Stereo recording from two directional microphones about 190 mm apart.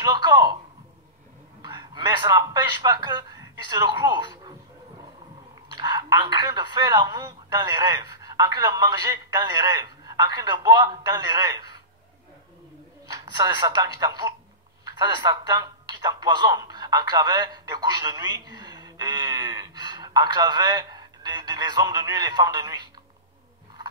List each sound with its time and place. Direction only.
0.0 s speech: 20° right (ahead or behind)
1.6 s a man's voice: 20° right (ahead or behind)
5.7 s speech: 20° right (ahead or behind)
13.1 s speech: 20° right (ahead or behind)